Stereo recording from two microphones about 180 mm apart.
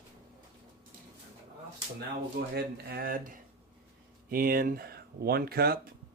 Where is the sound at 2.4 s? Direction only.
60° right (ahead or behind).